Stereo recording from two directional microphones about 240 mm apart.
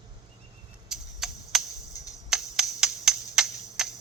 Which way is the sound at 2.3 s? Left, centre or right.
Centre.